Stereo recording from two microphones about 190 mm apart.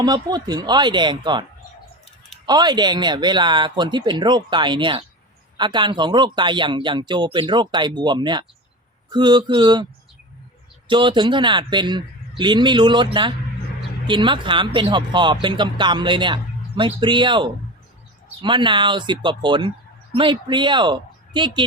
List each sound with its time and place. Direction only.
0.0 s speech: 20° right (ahead or behind)
2.5 s speech: 20° right (ahead or behind)
10.8 s speech: 25° right (ahead or behind)